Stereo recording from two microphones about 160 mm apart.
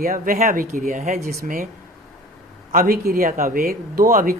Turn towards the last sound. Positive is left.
turn(degrees=-55)  # may be behind; listen again after turning